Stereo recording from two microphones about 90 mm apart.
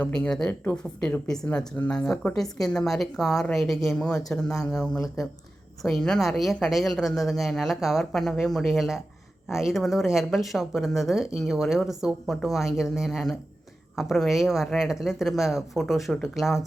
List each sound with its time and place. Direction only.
0.0 s speech: 10° left (ahead or behind)
0.6 s a woman's voice: 20° left (ahead or behind); by 16.6 s centre (ahead or behind)